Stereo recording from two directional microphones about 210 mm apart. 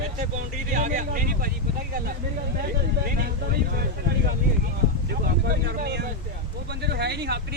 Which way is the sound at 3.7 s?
45° right (ahead or behind).